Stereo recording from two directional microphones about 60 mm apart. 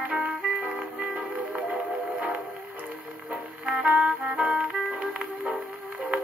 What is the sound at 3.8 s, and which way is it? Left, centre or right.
Music, right.